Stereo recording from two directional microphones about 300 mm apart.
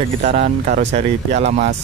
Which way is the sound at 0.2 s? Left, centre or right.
Right.